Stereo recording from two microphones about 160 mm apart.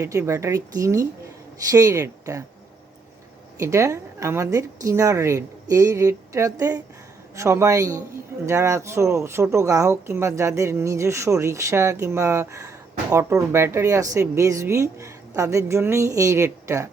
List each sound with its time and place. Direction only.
0.0 s a woman's voice: 20° right (ahead or behind)
3.6 s a woman's voice: 20° right (ahead or behind)